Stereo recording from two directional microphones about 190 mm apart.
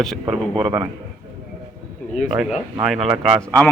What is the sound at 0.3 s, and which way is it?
Speech, 25° right (ahead or behind).